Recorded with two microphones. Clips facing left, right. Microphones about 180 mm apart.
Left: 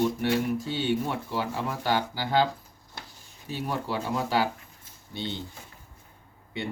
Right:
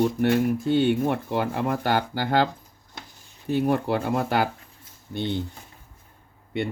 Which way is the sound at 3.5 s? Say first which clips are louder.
Right 9 dB; 55° right (ahead or behind).